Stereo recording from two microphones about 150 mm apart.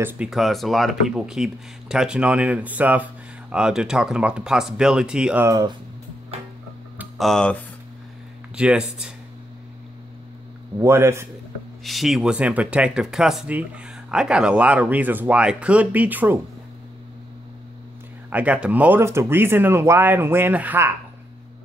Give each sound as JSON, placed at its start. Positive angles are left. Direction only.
{"t": 0.0, "sound": "speech", "side_deg": -5}
{"t": 7.2, "sound": "speech", "side_deg": 5}
{"t": 8.5, "sound": "speech", "side_deg": -5}
{"t": 10.8, "sound": "speech", "side_deg": -15}
{"t": 11.8, "sound": "speech", "side_deg": 0}
{"t": 18.3, "sound": "speech", "side_deg": -10}